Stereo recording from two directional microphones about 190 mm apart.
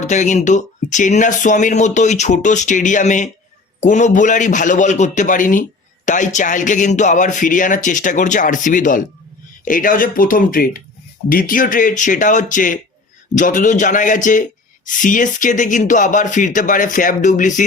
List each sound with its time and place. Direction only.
0.0 s speech: 40° left (ahead or behind)